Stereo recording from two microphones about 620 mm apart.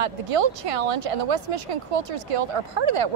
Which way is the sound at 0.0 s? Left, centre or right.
Right.